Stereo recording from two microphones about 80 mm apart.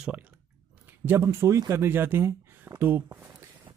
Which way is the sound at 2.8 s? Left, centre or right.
Right.